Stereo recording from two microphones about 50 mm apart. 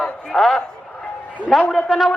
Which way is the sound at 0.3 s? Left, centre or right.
Centre.